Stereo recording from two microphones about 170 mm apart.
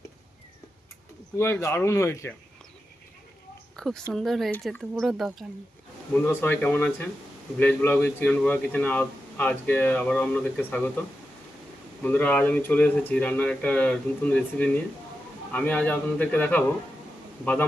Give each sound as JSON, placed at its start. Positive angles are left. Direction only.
{"t": 1.4, "sound": "a man's voice", "side_deg": 15}
{"t": 3.8, "sound": "speech", "side_deg": 5}
{"t": 6.2, "sound": "a man's voice", "side_deg": 10}
{"t": 12.0, "sound": "a man's voice", "side_deg": 10}